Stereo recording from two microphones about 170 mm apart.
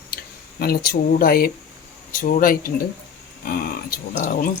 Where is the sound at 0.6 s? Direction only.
65° left (ahead or behind).